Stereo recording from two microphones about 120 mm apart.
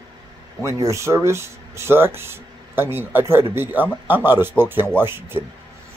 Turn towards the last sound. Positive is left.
turn(degrees=-20)  # may be behind; listen again after turning